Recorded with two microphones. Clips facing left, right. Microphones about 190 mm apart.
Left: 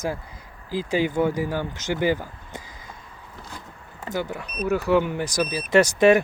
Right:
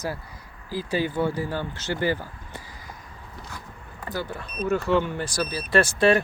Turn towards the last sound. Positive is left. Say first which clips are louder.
# left 3 dB
turn(degrees=15)  # may be behind; listen again after turning